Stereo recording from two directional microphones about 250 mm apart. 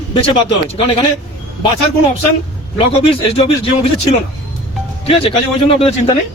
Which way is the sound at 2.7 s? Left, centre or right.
Left.